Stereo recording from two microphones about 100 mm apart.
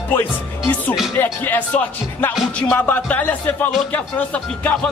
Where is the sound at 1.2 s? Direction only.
20° left (ahead or behind).